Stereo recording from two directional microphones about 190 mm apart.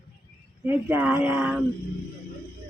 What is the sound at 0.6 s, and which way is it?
Speech, 10° right (ahead or behind).